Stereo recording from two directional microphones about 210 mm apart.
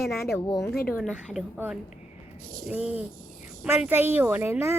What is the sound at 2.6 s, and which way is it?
A child's voice, 5° right (ahead or behind).